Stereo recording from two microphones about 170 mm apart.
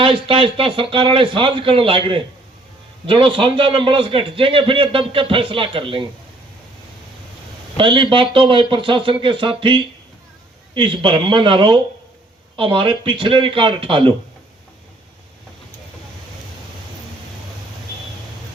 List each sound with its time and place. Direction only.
0.0 s a man's voice: 30° right (ahead or behind)
7.8 s a man's voice: 30° right (ahead or behind)